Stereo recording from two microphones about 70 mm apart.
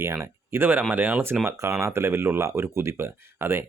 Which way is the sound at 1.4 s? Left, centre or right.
Right.